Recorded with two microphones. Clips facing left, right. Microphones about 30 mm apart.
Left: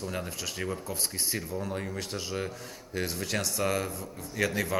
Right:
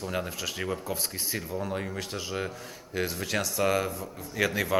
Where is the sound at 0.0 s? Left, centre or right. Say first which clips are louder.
Right 3 dB; centre.